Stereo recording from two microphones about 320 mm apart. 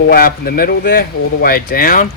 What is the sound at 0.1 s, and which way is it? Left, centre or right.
Speech, left.